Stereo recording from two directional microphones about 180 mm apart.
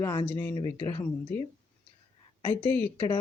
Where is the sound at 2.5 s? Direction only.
10° left (ahead or behind).